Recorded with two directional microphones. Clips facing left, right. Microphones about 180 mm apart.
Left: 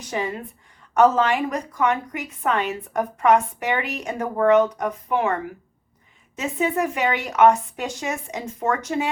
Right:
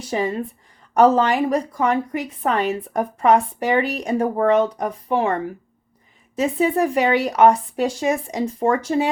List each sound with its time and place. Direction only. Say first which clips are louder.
0.0 s a woman's voice: right 5 dB; 30° right (ahead or behind)